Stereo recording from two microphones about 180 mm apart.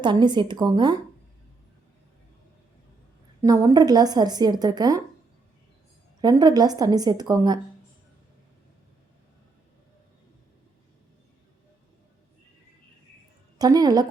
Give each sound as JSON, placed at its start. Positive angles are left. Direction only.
{"t": 0.0, "sound": "a woman's voice", "side_deg": -25}
{"t": 3.4, "sound": "a woman's voice", "side_deg": -20}
{"t": 6.2, "sound": "a woman's voice", "side_deg": -20}
{"t": 13.6, "sound": "a woman's voice", "side_deg": -20}